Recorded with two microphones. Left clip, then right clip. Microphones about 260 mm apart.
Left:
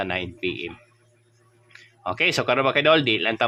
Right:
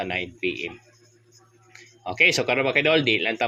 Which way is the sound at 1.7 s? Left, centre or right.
Centre.